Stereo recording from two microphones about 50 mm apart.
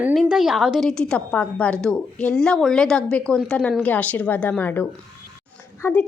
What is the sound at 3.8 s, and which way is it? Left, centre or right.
Speech, left.